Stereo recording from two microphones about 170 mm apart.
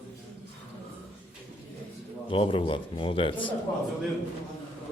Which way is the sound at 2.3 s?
30° left (ahead or behind).